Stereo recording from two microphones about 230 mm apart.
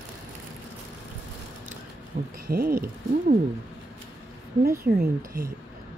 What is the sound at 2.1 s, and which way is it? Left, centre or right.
Speech, right.